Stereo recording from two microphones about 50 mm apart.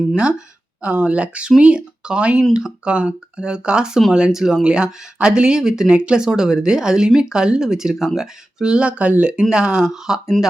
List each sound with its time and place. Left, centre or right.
0.2 s speech: centre